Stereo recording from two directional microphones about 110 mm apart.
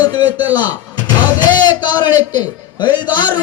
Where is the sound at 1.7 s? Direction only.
40° left (ahead or behind).